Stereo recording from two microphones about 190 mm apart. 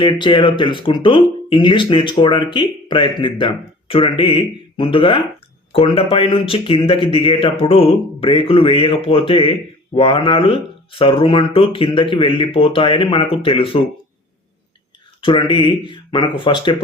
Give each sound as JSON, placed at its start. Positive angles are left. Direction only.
{"t": 0.0, "sound": "speech", "side_deg": 25}
{"t": 15.2, "sound": "speech", "side_deg": 25}